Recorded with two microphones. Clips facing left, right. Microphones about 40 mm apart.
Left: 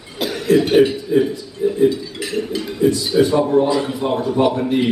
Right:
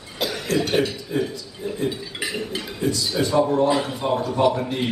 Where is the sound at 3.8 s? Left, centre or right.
Centre.